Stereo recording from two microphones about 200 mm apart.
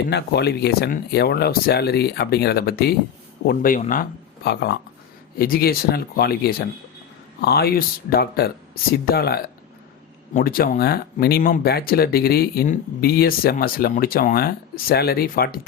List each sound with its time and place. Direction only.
0.1 s speech: 55° left (ahead or behind)
4.4 s speech: 55° left (ahead or behind)